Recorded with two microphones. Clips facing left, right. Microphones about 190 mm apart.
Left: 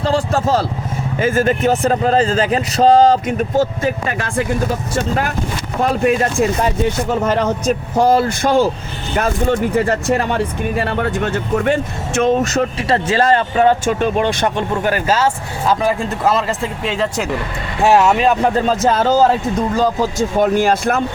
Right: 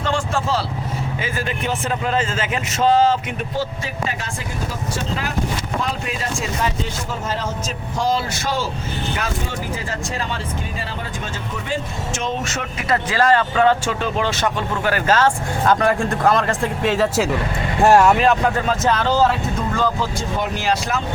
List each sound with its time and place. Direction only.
0.0 s vehicle: 35° left (ahead or behind)
1.2 s speech: 45° left (ahead or behind)
5.9 s speech: 55° left (ahead or behind); by 14.5 s 20° left (ahead or behind)
14.9 s speech: 10° left (ahead or behind)
18.4 s speech: 30° left (ahead or behind); by 21.0 s 50° left (ahead or behind)